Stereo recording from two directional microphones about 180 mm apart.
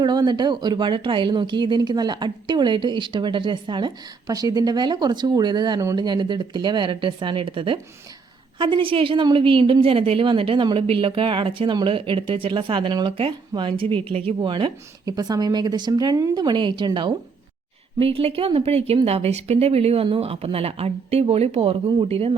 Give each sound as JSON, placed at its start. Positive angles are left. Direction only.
{"t": 0.0, "sound": "a woman's voice", "side_deg": -25}